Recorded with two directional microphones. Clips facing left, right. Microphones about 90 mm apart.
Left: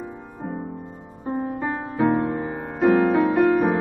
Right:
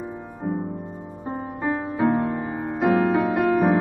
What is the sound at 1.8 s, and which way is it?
Music, 10° left (ahead or behind).